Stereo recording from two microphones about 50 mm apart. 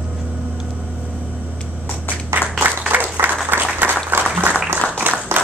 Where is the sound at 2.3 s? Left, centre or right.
Right.